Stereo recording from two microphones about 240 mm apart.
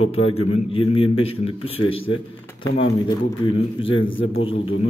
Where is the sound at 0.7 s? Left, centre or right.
Left.